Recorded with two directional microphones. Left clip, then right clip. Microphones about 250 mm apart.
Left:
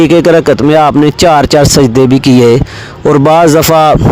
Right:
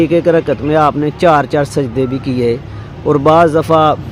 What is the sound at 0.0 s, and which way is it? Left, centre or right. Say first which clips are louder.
Speech: left 6 dB; left.